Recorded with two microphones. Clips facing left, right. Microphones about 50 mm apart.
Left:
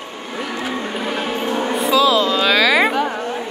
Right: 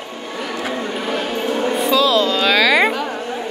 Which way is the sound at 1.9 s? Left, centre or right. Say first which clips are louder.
Left 2 dB; centre.